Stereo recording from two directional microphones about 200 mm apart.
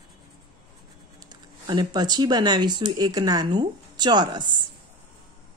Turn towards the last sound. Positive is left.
turn(degrees=-20)  # may be behind; listen again after turning